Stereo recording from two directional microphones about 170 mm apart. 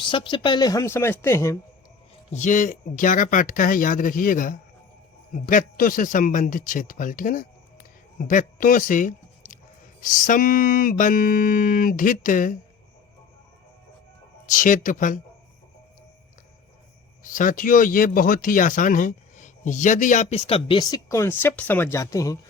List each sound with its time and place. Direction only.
0.0 s a woman's voice: 30° left (ahead or behind)
2.3 s speech: 45° left (ahead or behind)
14.5 s speech: 50° left (ahead or behind)
17.2 s speech: 50° left (ahead or behind); by 22.4 s 20° left (ahead or behind)